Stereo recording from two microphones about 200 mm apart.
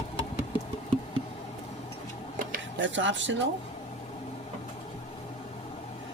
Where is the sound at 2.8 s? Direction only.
70° right (ahead or behind).